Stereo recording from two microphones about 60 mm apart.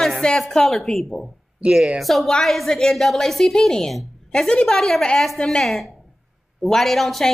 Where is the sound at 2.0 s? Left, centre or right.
Centre.